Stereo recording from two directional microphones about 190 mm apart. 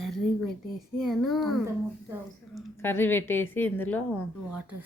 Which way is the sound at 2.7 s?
10° left (ahead or behind).